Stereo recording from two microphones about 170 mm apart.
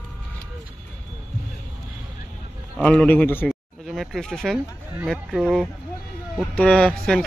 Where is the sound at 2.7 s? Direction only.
5° left (ahead or behind).